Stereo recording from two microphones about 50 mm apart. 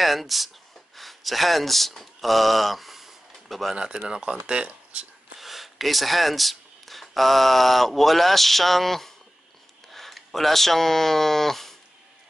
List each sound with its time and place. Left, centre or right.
0.0 s speech: centre
3.7 s speech: centre
5.4 s speech: centre